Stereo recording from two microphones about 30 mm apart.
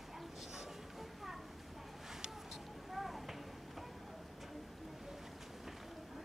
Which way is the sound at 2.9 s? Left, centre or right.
Centre.